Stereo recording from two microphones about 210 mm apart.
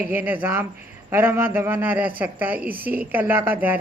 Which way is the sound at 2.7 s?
45° right (ahead or behind).